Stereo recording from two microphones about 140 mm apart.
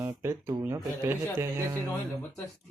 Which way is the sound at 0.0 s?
20° right (ahead or behind).